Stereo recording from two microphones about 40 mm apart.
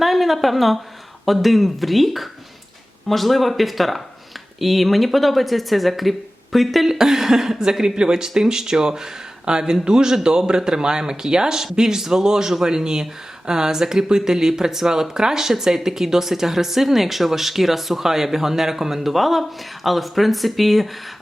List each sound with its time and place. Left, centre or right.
0.0 s a woman's voice: centre